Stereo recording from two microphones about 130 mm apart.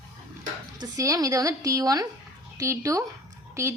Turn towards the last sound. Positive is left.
turn(degrees=-20)  # may be behind; listen again after turning